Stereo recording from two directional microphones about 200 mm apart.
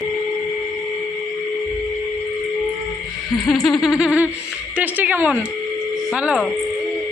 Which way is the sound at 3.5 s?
Centre (ahead or behind).